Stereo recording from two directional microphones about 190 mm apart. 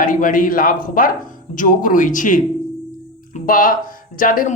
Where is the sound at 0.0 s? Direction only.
45° left (ahead or behind).